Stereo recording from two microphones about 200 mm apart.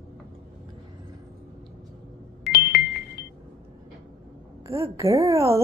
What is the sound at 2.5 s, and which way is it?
Music, 55° left (ahead or behind).